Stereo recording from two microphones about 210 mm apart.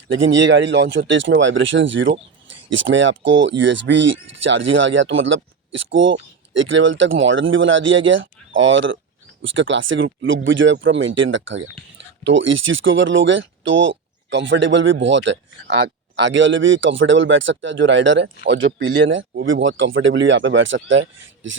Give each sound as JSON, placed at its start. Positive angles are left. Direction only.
{"t": 0.1, "sound": "speech", "side_deg": -65}